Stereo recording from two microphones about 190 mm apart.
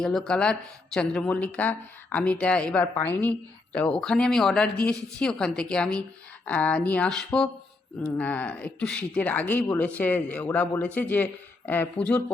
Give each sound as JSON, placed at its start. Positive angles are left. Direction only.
{"t": 0.0, "sound": "a man's voice", "side_deg": 5}